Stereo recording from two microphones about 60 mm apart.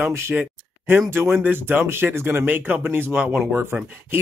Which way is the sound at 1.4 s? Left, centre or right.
Right.